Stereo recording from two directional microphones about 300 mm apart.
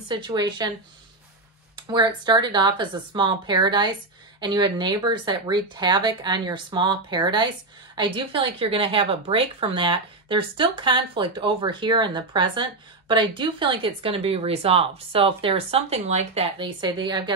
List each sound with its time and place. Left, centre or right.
0.1 s speech: centre
1.8 s speech: centre